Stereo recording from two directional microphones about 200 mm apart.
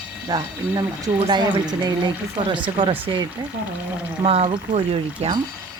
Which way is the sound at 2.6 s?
25° right (ahead or behind).